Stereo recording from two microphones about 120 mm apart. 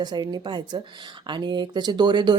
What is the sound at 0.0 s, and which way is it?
Speech, 35° right (ahead or behind).